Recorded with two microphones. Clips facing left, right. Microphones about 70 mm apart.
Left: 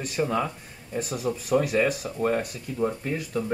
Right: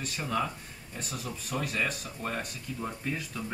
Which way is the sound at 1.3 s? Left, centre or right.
Left.